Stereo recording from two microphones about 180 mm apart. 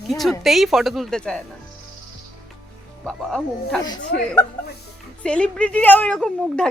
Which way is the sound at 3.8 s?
20° left (ahead or behind).